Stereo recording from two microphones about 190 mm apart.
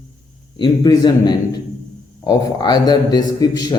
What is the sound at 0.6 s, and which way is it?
A man's voice, 20° left (ahead or behind).